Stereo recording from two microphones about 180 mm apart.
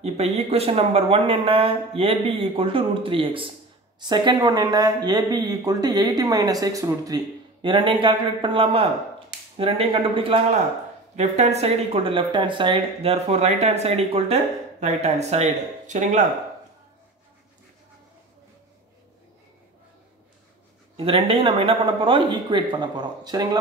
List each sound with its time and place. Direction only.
0.0 s speech: 35° right (ahead or behind)
20.9 s speech: 30° right (ahead or behind)